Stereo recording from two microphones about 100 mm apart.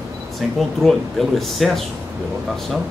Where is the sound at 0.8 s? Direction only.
Centre (ahead or behind).